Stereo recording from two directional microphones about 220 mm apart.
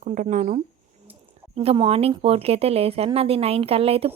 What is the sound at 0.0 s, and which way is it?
Speech, 35° right (ahead or behind).